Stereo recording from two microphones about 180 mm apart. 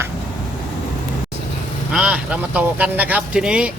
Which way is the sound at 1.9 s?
5° right (ahead or behind).